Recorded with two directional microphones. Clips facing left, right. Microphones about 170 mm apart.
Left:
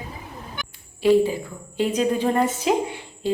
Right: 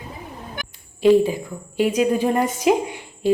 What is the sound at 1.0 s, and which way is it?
A woman's voice, 15° right (ahead or behind).